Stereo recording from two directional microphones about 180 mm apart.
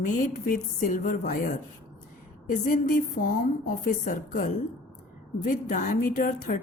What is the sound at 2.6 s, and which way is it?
A woman's voice, 50° left (ahead or behind).